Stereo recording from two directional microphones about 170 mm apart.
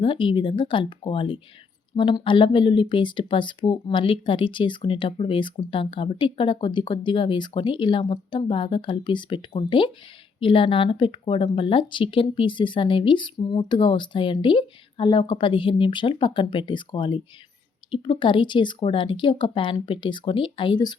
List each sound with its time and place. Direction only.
0.0 s speech: 30° left (ahead or behind)